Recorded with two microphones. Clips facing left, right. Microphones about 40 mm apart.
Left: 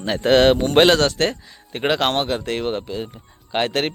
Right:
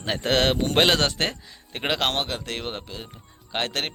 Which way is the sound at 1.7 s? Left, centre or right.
Centre.